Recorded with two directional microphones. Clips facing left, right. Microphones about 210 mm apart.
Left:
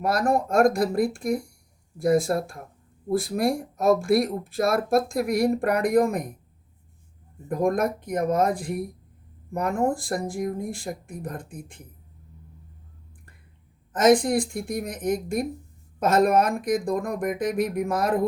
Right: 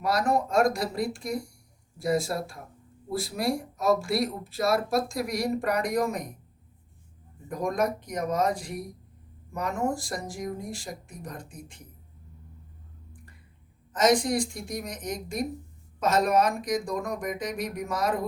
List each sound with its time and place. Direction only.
0.0 s speech: 50° left (ahead or behind)
7.4 s speech: 55° left (ahead or behind)
13.9 s speech: 50° left (ahead or behind)